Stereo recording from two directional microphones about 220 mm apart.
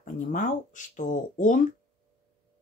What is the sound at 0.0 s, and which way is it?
Speech, 35° left (ahead or behind).